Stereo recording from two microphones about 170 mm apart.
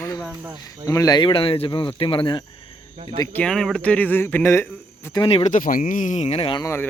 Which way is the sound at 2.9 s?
40° right (ahead or behind).